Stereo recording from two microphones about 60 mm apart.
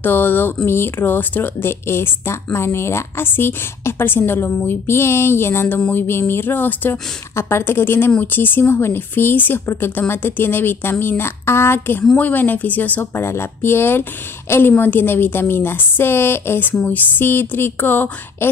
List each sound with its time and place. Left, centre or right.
0.0 s speech: left
12.2 s speech: left
13.1 s speech: left